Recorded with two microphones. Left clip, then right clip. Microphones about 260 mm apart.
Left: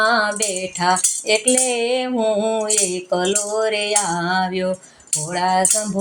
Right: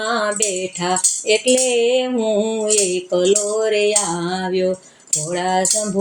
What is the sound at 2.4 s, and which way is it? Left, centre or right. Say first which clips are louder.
Music: right 1 dB; left.